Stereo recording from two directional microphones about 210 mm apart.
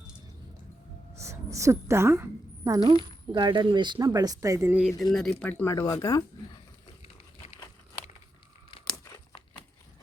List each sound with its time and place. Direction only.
1.1 s a woman's voice: 15° right (ahead or behind); by 6.2 s 15° left (ahead or behind)